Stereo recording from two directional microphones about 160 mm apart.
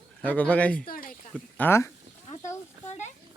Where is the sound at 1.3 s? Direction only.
10° left (ahead or behind).